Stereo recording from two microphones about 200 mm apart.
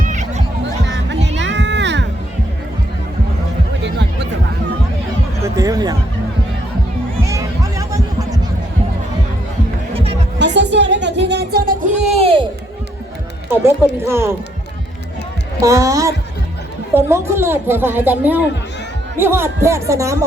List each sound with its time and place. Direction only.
0.0 s music: 40° right (ahead or behind)
1.4 s music: 65° right (ahead or behind)
3.8 s music: 60° right (ahead or behind)
5.4 s music: 20° right (ahead or behind)
7.3 s music: 15° right (ahead or behind)
9.9 s music: 30° right (ahead or behind)
10.3 s music: 60° right (ahead or behind); by 12.5 s 30° right (ahead or behind)
13.5 s run: 10° right (ahead or behind)
15.6 s speech: 15° right (ahead or behind)